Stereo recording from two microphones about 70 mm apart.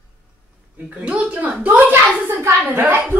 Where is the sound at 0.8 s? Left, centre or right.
Centre.